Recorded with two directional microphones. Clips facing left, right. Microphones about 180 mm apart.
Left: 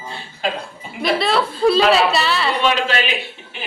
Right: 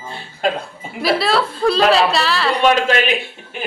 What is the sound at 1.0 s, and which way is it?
Speech, centre (ahead or behind).